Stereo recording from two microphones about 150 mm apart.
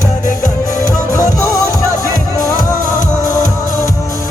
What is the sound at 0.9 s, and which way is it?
Music, 20° left (ahead or behind).